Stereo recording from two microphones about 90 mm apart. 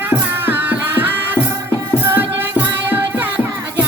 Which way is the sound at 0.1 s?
25° right (ahead or behind).